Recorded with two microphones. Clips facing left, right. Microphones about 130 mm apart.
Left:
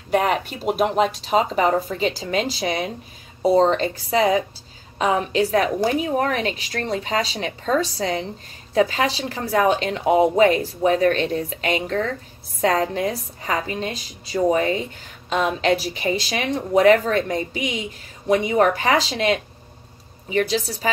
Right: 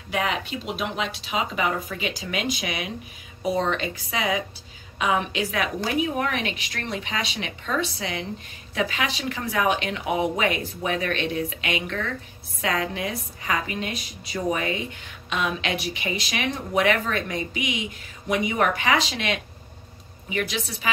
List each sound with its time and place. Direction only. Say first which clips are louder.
0.1 s speech: left 6 dB; 45° left (ahead or behind)